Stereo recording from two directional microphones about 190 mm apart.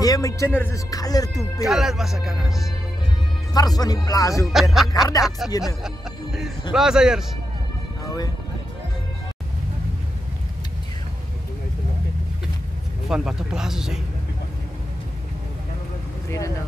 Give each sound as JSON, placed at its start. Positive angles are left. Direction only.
{"t": 0.0, "sound": "speech", "side_deg": 20}
{"t": 1.3, "sound": "speech", "side_deg": 0}
{"t": 3.5, "sound": "speech", "side_deg": 20}
{"t": 4.5, "sound": "speech", "side_deg": 0}
{"t": 6.7, "sound": "speech", "side_deg": -5}
{"t": 13.1, "sound": "speech", "side_deg": -5}
{"t": 16.3, "sound": "speech", "side_deg": 15}